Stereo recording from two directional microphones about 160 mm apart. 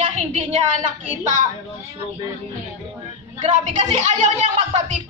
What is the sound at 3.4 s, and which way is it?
Speech, 45° right (ahead or behind).